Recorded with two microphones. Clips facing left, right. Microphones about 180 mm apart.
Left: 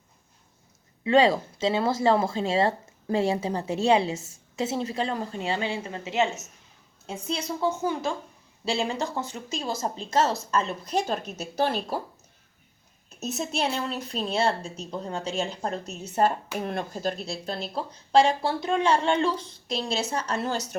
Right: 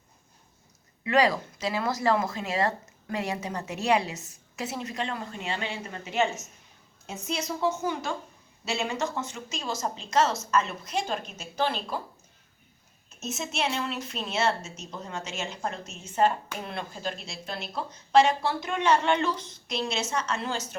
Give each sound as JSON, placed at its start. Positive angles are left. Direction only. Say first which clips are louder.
{"t": 1.0, "sound": "speech", "louder": "left 4 dB", "side_deg": 25}
{"t": 13.1, "sound": "speech", "louder": "left 3 dB", "side_deg": 35}